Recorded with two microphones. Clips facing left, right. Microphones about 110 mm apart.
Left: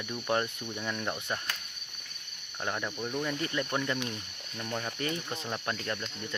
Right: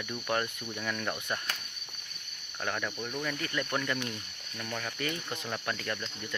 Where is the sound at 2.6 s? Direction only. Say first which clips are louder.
Even; 15° left (ahead or behind).